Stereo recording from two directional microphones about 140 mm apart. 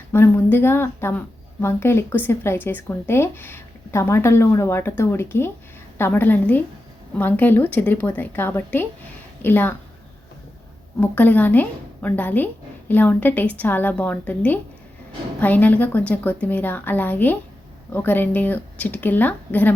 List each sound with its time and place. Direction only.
0.1 s speech: 15° left (ahead or behind)
11.0 s speech: 10° left (ahead or behind)